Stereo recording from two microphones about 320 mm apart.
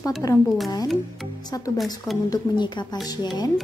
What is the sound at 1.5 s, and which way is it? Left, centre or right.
A woman's voice, centre.